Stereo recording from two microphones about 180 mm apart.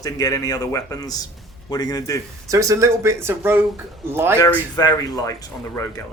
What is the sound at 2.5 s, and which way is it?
Speech, 15° right (ahead or behind).